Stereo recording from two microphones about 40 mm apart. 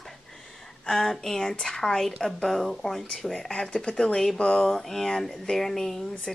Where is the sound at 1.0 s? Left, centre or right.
Centre.